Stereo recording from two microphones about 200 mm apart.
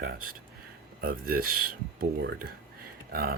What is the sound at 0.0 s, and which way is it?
Speech, 45° right (ahead or behind).